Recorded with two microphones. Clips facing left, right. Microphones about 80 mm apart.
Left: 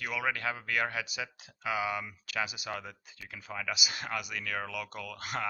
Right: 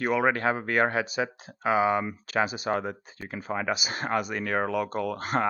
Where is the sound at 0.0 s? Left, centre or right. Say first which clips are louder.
Right 9 dB; right.